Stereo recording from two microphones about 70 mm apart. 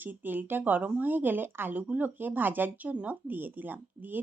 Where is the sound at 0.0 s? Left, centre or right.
Right.